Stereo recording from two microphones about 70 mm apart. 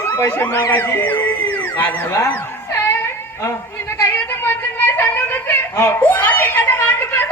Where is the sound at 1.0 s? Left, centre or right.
Left.